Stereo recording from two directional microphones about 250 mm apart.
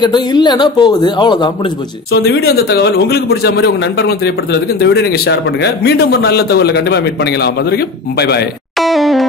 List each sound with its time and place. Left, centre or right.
0.0 s speech: centre
2.1 s a man's voice: left
8.7 s music: centre